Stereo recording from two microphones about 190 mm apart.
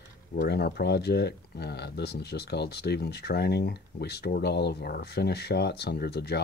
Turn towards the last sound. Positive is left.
turn(degrees=60)  # may be behind; listen again after turning